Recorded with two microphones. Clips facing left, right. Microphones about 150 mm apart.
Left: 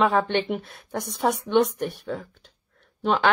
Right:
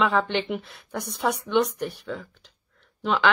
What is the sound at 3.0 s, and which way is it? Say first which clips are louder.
Speech: left 1 dB; 45° left (ahead or behind).